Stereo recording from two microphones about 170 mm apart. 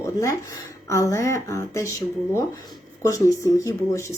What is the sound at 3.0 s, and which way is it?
Speech, 20° left (ahead or behind).